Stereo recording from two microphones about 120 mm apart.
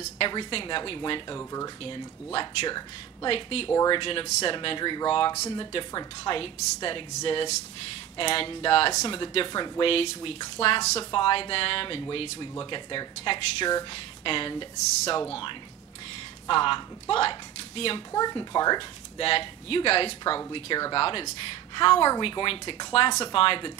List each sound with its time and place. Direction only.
0.3 s a woman's voice: 45° left (ahead or behind)
1.3 s speech: 30° left (ahead or behind)
3.3 s a woman's voice: 50° left (ahead or behind)
8.2 s a woman's voice: 50° left (ahead or behind)
11.1 s a woman's voice: 45° left (ahead or behind)
16.4 s speech: 45° left (ahead or behind)
18.1 s speech: 35° left (ahead or behind)
19.1 s a woman's voice: 50° left (ahead or behind)